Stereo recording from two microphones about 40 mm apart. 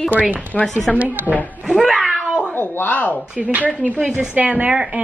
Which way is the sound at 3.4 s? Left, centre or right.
Right.